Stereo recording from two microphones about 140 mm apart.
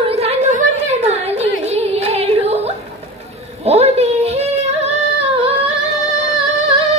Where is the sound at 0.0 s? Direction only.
45° right (ahead or behind).